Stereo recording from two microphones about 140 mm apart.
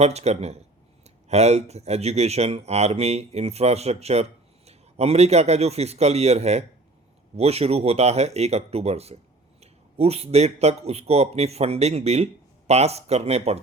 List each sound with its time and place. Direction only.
0.0 s speech: 50° right (ahead or behind)